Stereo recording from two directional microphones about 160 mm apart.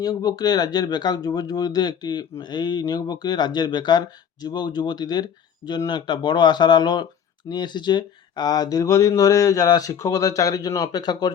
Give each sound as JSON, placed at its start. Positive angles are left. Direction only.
{"t": 0.0, "sound": "speech", "side_deg": 25}